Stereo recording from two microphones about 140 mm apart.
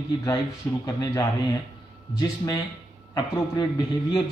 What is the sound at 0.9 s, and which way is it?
A man's voice, 30° left (ahead or behind).